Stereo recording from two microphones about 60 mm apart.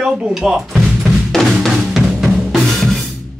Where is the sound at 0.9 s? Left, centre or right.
Centre.